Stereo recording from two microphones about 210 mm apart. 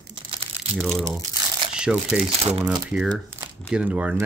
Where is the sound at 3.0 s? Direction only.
15° right (ahead or behind).